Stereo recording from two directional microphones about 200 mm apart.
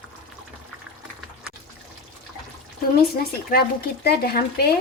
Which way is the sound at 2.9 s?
50° left (ahead or behind).